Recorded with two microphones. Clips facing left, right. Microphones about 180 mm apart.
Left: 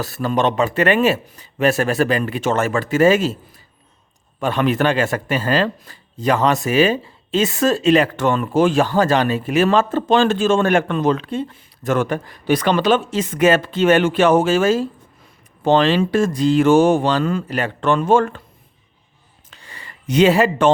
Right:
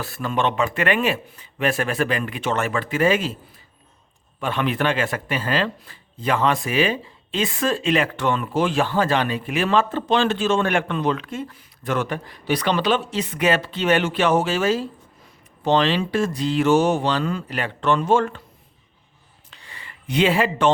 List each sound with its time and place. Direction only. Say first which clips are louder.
0.0 s speech: left 4 dB; 35° left (ahead or behind)
4.4 s speech: left 5 dB; 40° left (ahead or behind)
11.2 s speech: left 6 dB; 30° left (ahead or behind)
11.8 s speech: left 5 dB; 45° left (ahead or behind)
19.5 s a sound: left 3 dB; 45° left (ahead or behind)